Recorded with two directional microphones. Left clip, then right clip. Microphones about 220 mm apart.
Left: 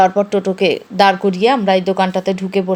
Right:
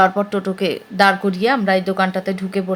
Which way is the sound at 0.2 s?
10° left (ahead or behind).